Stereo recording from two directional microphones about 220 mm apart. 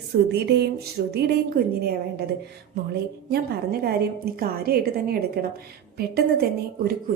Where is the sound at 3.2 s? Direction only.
45° right (ahead or behind).